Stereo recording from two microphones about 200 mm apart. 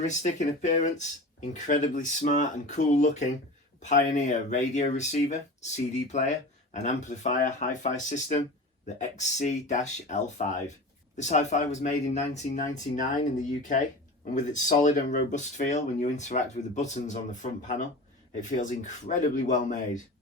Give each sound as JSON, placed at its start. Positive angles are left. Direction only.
{"t": 0.0, "sound": "speech", "side_deg": 35}